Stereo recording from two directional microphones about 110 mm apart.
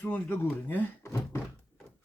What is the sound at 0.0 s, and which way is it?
Speech, 20° left (ahead or behind).